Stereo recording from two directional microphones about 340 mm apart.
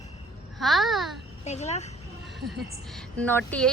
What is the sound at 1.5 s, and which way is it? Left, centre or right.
Speech, centre.